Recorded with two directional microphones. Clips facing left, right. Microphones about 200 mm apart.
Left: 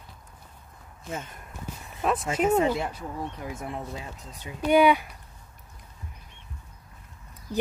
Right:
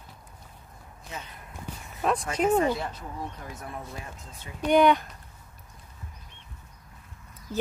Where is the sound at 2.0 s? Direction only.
Centre (ahead or behind).